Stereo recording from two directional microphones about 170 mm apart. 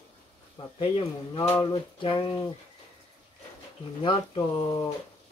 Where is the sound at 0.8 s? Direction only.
30° left (ahead or behind).